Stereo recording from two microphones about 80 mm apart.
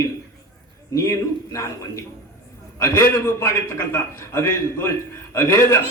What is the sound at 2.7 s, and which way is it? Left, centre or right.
A man's voice, left.